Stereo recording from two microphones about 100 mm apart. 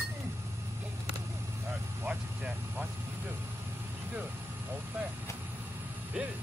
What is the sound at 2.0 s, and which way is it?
Vehicle, 15° right (ahead or behind).